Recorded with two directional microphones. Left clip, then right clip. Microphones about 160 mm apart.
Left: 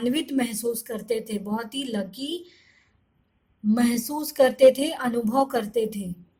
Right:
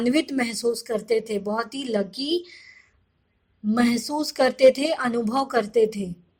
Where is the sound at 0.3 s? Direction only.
15° right (ahead or behind).